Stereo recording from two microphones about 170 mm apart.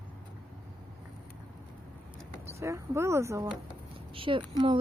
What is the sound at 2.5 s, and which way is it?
Speech, 15° right (ahead or behind).